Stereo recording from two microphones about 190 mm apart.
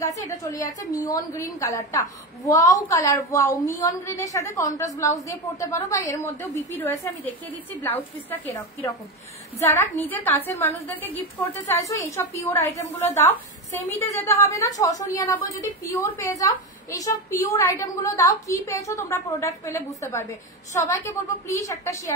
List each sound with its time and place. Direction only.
0.0 s a woman's voice: 20° left (ahead or behind)